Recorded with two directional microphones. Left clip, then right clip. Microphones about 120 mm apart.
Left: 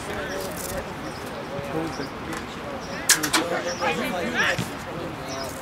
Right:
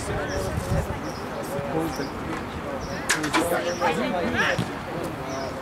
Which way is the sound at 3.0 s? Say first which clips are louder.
Left 2 dB; 40° left (ahead or behind).